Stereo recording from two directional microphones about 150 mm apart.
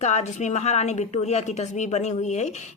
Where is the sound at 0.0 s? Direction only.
50° left (ahead or behind).